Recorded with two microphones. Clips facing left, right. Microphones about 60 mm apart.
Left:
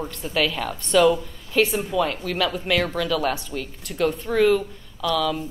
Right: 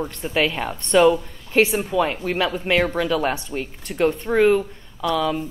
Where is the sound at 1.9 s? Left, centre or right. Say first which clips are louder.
Right 2 dB; right.